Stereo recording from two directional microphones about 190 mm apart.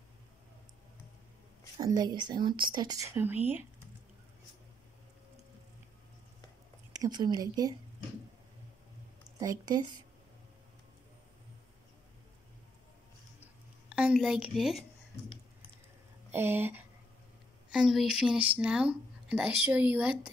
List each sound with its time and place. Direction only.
1.8 s speech: 20° right (ahead or behind)
7.0 s speech: 20° right (ahead or behind)
9.4 s speech: 20° right (ahead or behind)
13.4 s a sound: 5° right (ahead or behind)
16.3 s a woman's voice: 10° right (ahead or behind)